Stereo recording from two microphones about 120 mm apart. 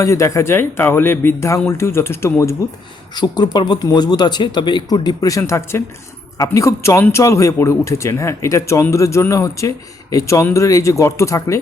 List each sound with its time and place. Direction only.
0.0 s speech: 25° left (ahead or behind)
3.2 s speech: 35° left (ahead or behind)